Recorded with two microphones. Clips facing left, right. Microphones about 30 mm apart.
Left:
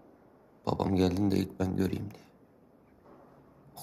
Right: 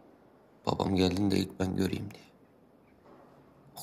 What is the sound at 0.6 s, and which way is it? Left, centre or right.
Speech, right.